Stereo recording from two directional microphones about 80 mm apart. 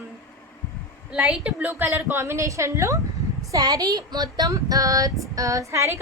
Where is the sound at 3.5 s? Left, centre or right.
Right.